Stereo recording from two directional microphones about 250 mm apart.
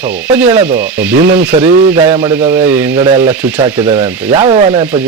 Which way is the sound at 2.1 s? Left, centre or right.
Centre.